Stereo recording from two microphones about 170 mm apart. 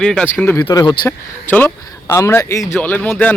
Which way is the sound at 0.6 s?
20° left (ahead or behind).